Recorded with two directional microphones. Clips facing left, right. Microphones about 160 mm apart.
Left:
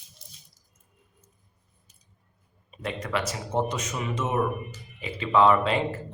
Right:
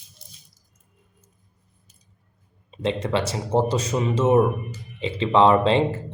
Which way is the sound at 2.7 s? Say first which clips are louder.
Right 7 dB; 25° right (ahead or behind).